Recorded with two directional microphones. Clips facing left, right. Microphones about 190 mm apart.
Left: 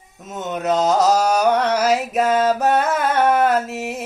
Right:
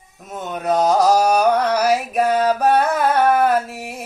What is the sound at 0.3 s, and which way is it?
Mantra, 20° left (ahead or behind).